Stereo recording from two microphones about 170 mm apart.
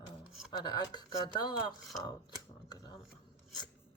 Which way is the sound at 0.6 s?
25° left (ahead or behind).